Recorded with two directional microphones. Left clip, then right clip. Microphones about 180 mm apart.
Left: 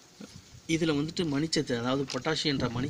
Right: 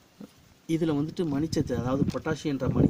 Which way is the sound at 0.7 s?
15° right (ahead or behind).